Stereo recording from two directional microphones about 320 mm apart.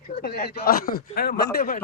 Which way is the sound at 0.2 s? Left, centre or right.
Left.